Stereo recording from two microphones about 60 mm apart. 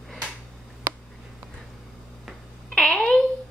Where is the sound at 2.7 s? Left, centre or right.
Centre.